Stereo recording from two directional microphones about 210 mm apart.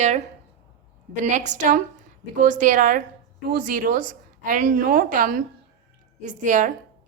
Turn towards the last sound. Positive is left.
turn(degrees=-35)  # may be behind; listen again after turning